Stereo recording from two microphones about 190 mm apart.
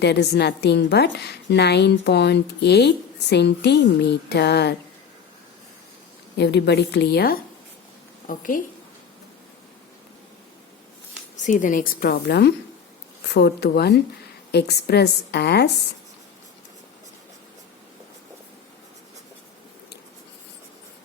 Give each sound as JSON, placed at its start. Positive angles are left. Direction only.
{"t": 0.0, "sound": "a woman's voice", "side_deg": 60}
{"t": 6.3, "sound": "a woman's voice", "side_deg": 65}
{"t": 8.3, "sound": "a woman's voice", "side_deg": 45}
{"t": 11.4, "sound": "a woman's voice", "side_deg": 45}